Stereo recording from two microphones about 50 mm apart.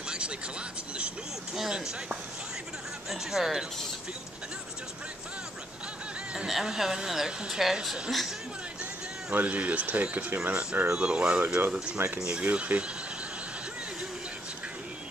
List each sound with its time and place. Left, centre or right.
1.5 s speech: centre
3.1 s speech: centre
6.3 s speech: centre
9.3 s speech: right
10.5 s speech: right